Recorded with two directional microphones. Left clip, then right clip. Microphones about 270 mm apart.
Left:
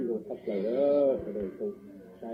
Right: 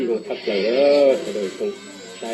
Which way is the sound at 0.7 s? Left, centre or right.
Right.